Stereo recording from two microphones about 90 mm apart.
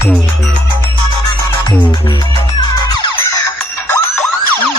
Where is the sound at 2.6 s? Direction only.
55° left (ahead or behind).